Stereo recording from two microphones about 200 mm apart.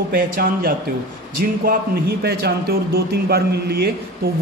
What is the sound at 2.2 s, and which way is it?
Speech, 50° right (ahead or behind).